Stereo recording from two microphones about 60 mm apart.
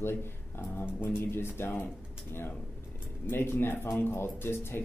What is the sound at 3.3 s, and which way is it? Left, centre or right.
Speech, left.